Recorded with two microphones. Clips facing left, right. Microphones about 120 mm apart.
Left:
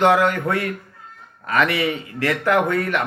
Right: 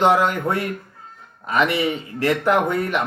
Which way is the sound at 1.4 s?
20° right (ahead or behind).